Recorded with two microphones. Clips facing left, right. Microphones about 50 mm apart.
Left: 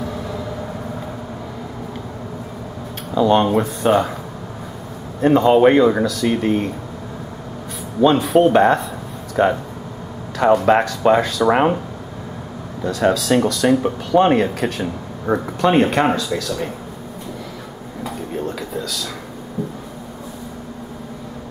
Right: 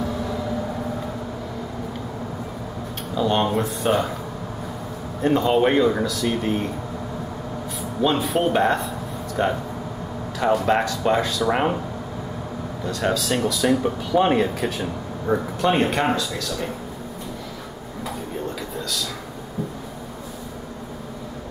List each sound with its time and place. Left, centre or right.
3.2 s speech: centre
5.2 s speech: centre
8.0 s speech: centre
9.4 s speech: centre
10.4 s speech: centre
11.5 s speech: centre
12.8 s speech: centre
18.0 s a sound: centre